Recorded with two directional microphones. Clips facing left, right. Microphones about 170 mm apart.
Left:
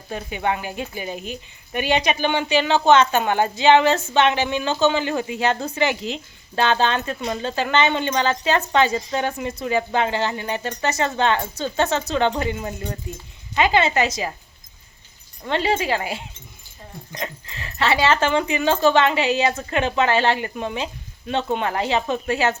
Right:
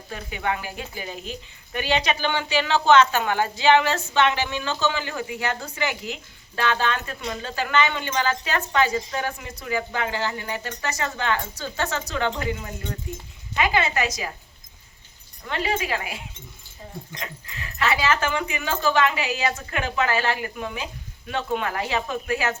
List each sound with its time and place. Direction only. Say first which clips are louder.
0.1 s speech: left 4 dB; 20° left (ahead or behind)
15.4 s speech: left 5 dB; 30° left (ahead or behind)